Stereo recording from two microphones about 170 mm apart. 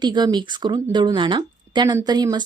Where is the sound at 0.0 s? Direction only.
25° right (ahead or behind).